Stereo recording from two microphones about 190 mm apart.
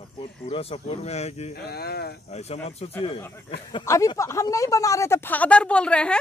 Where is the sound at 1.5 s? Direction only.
55° left (ahead or behind).